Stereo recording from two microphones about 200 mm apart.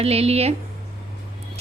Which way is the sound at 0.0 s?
30° right (ahead or behind).